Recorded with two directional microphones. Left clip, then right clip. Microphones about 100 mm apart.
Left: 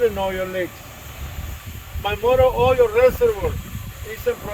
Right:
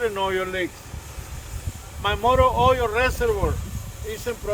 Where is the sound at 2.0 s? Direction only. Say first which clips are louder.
Left 2 dB; 25° right (ahead or behind).